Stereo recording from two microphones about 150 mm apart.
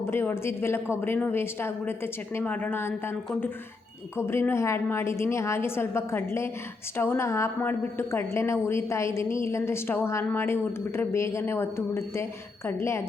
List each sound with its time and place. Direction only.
0.0 s a woman's voice: 15° left (ahead or behind)
4.2 s a woman's voice: 15° left (ahead or behind)